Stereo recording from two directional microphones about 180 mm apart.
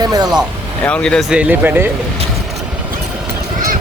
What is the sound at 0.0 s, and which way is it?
Speech, 20° right (ahead or behind).